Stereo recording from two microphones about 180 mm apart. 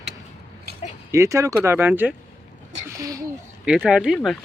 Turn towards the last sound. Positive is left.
turn(degrees=0)  # may be behind; listen again after turning